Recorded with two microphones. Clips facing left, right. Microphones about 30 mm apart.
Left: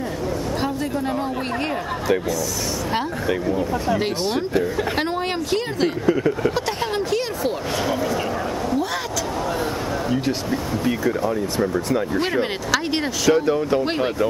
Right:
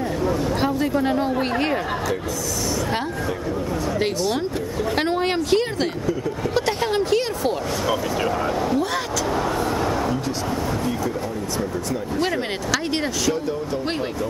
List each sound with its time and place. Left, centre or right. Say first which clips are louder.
0.6 s speech: right 3 dB; centre
4.9 s a woman's voice: right 2 dB; centre
6.0 s speech: left 5 dB; left
6.5 s speech: right 2 dB; centre
12.4 s speech: left 3 dB; centre
13.3 s speech: left 6 dB; left